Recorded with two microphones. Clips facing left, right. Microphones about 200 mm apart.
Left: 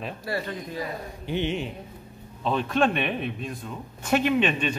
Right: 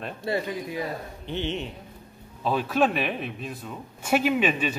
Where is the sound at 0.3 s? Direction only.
25° right (ahead or behind).